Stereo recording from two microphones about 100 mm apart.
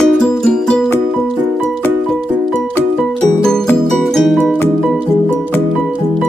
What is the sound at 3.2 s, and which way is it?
Music, 5° left (ahead or behind).